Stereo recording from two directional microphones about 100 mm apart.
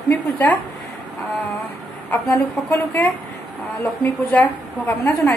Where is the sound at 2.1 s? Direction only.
20° left (ahead or behind).